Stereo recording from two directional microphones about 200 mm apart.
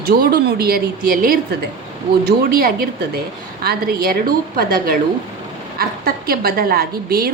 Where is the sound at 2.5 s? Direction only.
50° right (ahead or behind).